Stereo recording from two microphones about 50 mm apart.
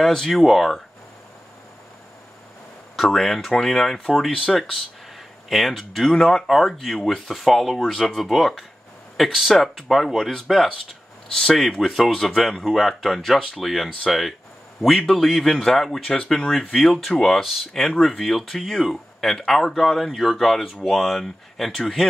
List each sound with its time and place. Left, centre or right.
0.3 s speech: centre
3.0 s speech: centre
11.9 s a man's voice: centre
17.4 s speech: centre